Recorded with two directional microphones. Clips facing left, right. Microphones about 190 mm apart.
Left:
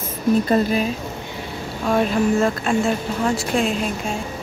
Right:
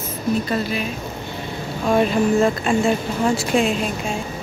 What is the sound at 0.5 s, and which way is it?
Speech, 45° left (ahead or behind).